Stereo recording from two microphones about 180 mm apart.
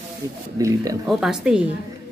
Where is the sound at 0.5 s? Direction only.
20° right (ahead or behind).